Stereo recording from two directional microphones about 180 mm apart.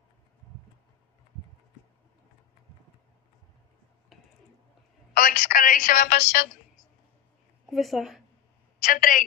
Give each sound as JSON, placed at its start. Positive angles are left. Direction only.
{"t": 4.1, "sound": "a sound", "side_deg": 0}
{"t": 5.1, "sound": "a woman's voice", "side_deg": 55}
{"t": 7.7, "sound": "speech", "side_deg": 0}
{"t": 8.7, "sound": "a woman's voice", "side_deg": 50}